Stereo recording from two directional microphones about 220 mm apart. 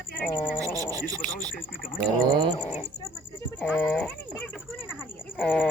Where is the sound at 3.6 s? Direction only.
5° left (ahead or behind).